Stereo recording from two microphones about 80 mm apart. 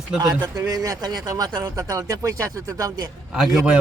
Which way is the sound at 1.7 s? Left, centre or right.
Right.